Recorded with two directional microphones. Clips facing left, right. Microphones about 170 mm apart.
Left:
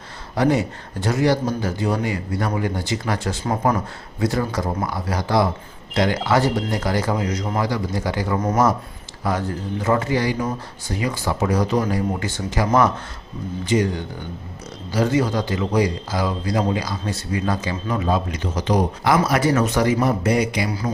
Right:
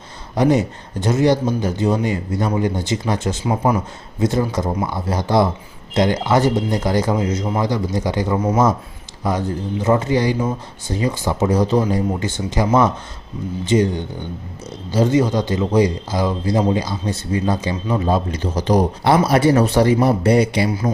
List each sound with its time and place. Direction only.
0.3 s a man's voice: 20° right (ahead or behind)
3.4 s speech: 10° right (ahead or behind)
4.2 s a man's voice: 20° right (ahead or behind)
8.4 s speech: 10° right (ahead or behind)
9.2 s a man's voice: 20° right (ahead or behind)